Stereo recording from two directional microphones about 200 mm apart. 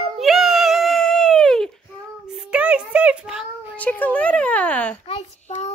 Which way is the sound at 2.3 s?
5° right (ahead or behind).